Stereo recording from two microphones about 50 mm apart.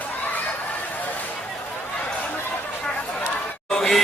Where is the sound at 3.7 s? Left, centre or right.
Centre.